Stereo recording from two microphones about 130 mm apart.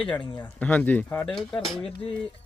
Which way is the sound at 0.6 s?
10° left (ahead or behind).